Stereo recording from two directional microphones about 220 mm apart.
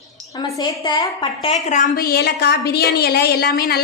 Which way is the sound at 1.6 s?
35° left (ahead or behind).